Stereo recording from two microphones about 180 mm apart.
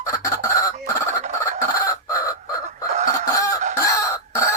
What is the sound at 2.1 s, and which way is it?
Chicken, 20° left (ahead or behind).